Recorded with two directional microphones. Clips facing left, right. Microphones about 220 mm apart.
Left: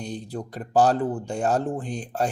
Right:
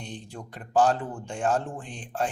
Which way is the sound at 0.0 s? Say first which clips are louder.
Left 7 dB; 40° left (ahead or behind).